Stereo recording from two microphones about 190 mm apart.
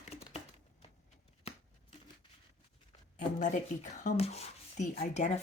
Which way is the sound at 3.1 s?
40° left (ahead or behind).